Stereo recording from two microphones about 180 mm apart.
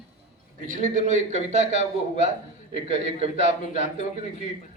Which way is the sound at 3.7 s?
45° left (ahead or behind).